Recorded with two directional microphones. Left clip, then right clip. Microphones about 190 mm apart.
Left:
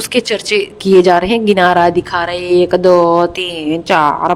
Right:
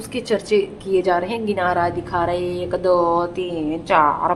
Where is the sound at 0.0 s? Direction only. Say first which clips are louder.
Left 8 dB; 50° left (ahead or behind).